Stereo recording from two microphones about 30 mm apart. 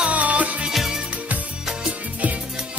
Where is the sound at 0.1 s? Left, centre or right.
Right.